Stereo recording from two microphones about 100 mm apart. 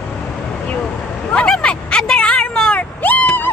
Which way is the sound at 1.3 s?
10° left (ahead or behind).